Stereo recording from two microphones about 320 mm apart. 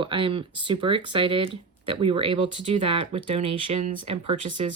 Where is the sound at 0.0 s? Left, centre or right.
Centre.